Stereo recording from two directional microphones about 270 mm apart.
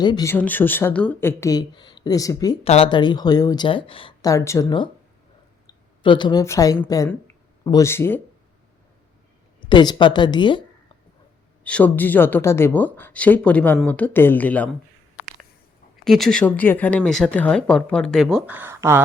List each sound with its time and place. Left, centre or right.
0.0 s speech: centre
9.6 s speech: centre
11.6 s speech: centre
16.0 s speech: centre